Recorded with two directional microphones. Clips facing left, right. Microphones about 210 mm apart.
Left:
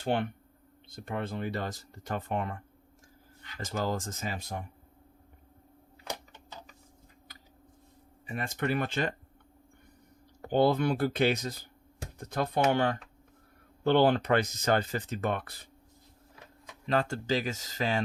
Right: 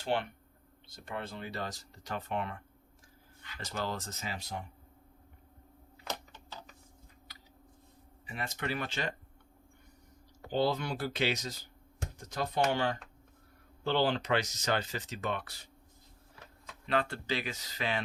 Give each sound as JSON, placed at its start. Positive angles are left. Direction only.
{"t": 0.9, "sound": "speech", "side_deg": 50}
{"t": 3.6, "sound": "speech", "side_deg": 45}
{"t": 8.3, "sound": "speech", "side_deg": 50}
{"t": 10.4, "sound": "speech", "side_deg": 55}
{"t": 16.8, "sound": "speech", "side_deg": 40}